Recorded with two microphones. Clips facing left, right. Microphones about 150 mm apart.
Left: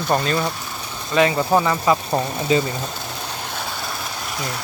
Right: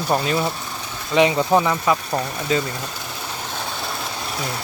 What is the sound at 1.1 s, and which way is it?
Speech, 20° right (ahead or behind).